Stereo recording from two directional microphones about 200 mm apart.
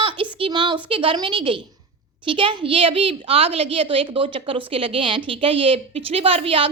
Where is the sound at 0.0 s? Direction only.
25° right (ahead or behind).